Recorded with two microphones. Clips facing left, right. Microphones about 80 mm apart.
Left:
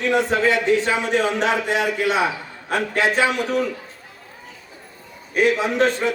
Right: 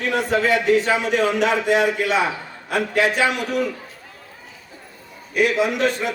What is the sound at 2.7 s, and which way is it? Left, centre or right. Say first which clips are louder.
Speech: right 1 dB; left.